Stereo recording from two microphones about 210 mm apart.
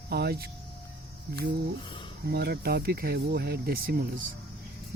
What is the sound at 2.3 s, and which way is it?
Speech, 50° right (ahead or behind).